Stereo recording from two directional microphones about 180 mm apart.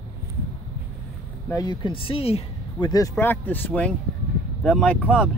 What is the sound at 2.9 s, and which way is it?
Speech, 15° left (ahead or behind).